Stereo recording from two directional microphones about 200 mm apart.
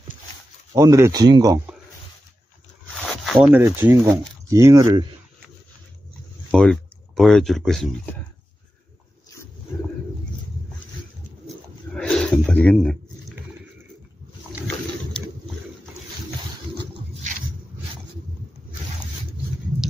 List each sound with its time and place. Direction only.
0.7 s speech: 15° right (ahead or behind)
3.3 s speech: 10° right (ahead or behind)
6.5 s speech: 5° left (ahead or behind)
11.4 s a sound: 5° left (ahead or behind)